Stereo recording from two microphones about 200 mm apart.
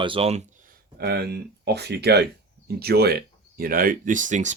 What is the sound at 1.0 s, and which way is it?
Speech, 50° right (ahead or behind).